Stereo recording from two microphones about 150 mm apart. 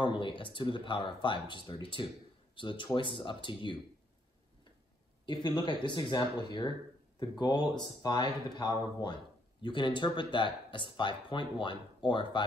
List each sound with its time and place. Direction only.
0.0 s speech: 35° left (ahead or behind)
5.2 s speech: 30° left (ahead or behind)